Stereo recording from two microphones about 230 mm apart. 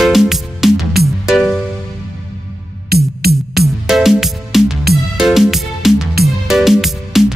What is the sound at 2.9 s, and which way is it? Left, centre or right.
Music, right.